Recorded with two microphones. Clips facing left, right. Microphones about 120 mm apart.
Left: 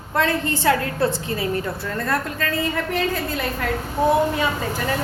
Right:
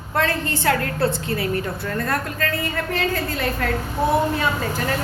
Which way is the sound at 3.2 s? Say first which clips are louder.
Right 1 dB; 15° left (ahead or behind).